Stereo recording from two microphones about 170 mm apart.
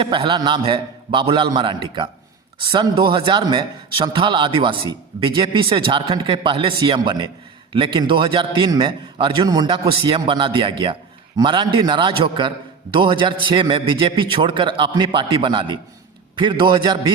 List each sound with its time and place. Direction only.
0.0 s speech: 30° right (ahead or behind)